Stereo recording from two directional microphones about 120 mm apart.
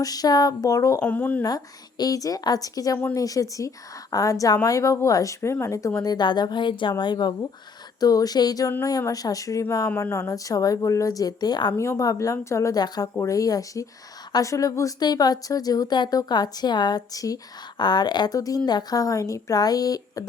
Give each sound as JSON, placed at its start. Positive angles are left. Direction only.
{"t": 0.0, "sound": "a woman's voice", "side_deg": 30}
{"t": 1.0, "sound": "speech", "side_deg": 15}
{"t": 1.4, "sound": "a woman's voice", "side_deg": 35}